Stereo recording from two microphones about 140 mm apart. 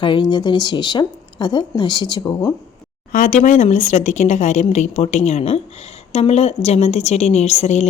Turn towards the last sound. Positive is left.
turn(degrees=55)  # may be behind; listen again after turning